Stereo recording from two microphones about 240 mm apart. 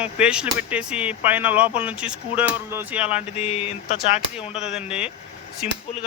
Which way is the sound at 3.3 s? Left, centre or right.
Left.